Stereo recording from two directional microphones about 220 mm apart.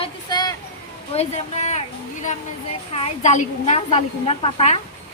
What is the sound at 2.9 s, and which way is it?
A woman's voice, 30° left (ahead or behind).